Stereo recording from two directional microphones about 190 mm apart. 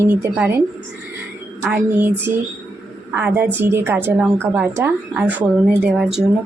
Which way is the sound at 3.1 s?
10° right (ahead or behind).